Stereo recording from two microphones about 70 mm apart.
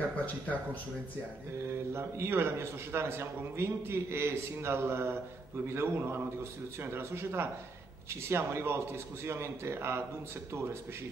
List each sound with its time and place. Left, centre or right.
2.0 s a man's voice: right